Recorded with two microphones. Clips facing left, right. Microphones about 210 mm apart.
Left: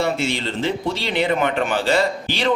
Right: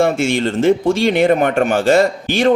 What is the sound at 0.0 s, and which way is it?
Speech, 50° right (ahead or behind).